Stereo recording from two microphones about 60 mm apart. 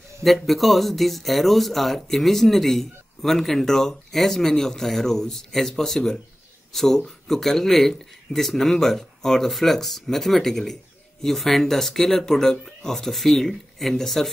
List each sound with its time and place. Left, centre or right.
0.2 s speech: centre